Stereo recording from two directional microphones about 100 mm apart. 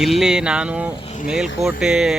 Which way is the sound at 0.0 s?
5° right (ahead or behind).